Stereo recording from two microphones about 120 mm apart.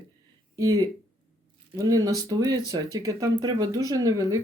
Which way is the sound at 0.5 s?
30° right (ahead or behind).